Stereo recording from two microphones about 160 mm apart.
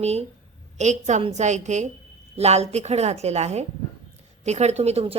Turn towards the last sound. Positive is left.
turn(degrees=-40)  # may be behind; listen again after turning